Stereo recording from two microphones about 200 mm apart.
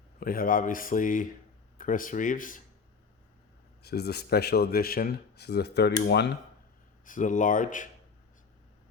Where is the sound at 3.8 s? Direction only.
55° left (ahead or behind).